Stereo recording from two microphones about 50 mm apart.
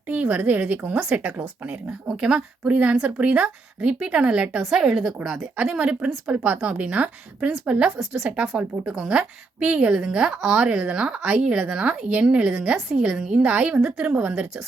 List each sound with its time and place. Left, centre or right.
0.1 s a woman's voice: right
4.6 s a woman's voice: centre
5.5 s speech: centre
8.2 s a woman's voice: centre
9.9 s speech: centre
13.8 s a woman's voice: centre
14.1 s speech: right